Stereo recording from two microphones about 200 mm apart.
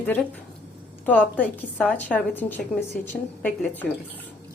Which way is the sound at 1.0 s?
5° left (ahead or behind).